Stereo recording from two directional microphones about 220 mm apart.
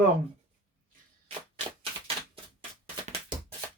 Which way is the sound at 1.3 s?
25° right (ahead or behind).